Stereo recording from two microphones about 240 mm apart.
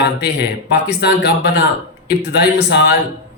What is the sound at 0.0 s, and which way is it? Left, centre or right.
A man's voice, left.